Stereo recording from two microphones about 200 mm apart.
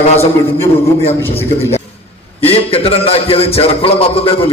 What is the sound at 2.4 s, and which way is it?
A man's voice, 30° left (ahead or behind).